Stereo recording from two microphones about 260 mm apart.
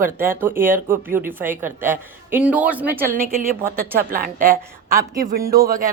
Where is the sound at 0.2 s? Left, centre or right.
Centre.